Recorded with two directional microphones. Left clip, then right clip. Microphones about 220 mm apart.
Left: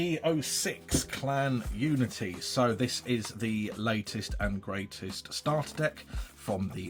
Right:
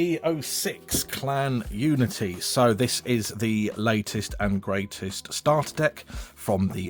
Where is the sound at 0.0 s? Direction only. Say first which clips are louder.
Right 4 dB; 50° right (ahead or behind).